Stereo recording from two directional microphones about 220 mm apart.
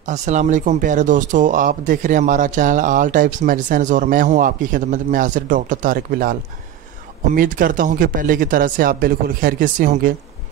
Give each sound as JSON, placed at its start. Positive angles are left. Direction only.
{"t": 0.0, "sound": "speech", "side_deg": -30}
{"t": 7.3, "sound": "speech", "side_deg": -40}